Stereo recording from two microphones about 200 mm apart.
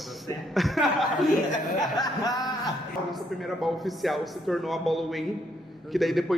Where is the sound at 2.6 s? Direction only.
Centre (ahead or behind).